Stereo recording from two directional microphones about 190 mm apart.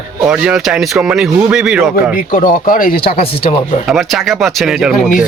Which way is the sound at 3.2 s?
30° left (ahead or behind).